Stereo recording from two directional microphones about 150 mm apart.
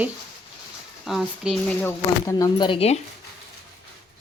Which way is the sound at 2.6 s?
40° left (ahead or behind).